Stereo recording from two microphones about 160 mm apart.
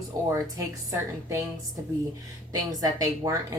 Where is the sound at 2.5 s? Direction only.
25° right (ahead or behind).